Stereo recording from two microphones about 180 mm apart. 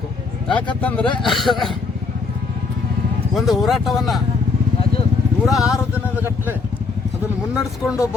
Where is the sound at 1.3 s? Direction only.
Centre (ahead or behind).